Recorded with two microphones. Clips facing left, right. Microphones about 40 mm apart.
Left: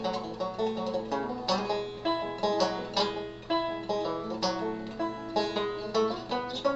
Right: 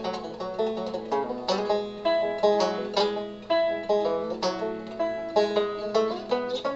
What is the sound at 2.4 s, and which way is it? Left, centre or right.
Music, centre.